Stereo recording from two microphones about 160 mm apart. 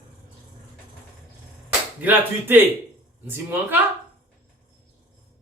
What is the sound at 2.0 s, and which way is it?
Speech, 10° right (ahead or behind).